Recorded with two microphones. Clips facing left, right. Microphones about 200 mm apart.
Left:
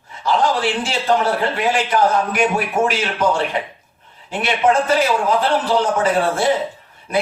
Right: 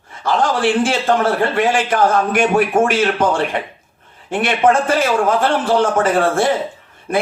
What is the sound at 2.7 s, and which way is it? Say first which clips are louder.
Speech: right 4 dB; 50° right (ahead or behind).